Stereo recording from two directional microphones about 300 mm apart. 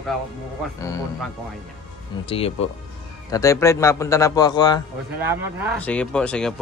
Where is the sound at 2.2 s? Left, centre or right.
Centre.